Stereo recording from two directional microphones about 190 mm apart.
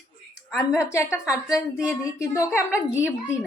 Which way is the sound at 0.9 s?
15° left (ahead or behind).